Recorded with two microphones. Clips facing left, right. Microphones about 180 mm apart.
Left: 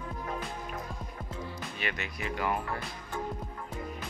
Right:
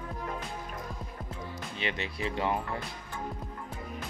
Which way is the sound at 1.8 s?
25° right (ahead or behind).